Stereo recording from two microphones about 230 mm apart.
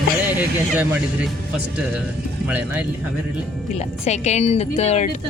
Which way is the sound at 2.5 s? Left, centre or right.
Centre.